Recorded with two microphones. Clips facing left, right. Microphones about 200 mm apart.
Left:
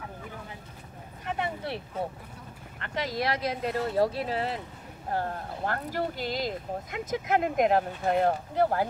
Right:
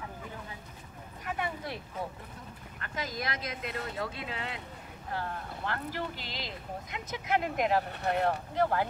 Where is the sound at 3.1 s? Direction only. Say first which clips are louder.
Left 7 dB; 35° left (ahead or behind).